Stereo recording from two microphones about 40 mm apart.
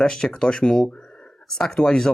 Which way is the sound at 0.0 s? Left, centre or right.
Centre.